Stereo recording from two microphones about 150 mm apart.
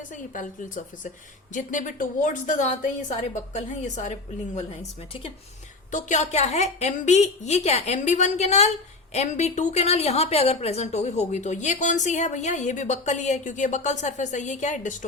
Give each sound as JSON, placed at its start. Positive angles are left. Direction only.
{"t": 0.1, "sound": "a woman's voice", "side_deg": 60}
{"t": 5.9, "sound": "a woman's voice", "side_deg": 50}